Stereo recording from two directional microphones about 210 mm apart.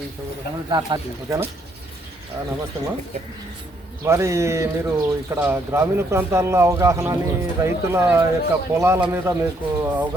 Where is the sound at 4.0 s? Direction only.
15° right (ahead or behind).